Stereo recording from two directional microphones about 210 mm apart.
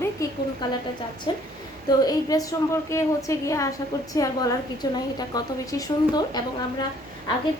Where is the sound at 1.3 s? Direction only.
20° left (ahead or behind).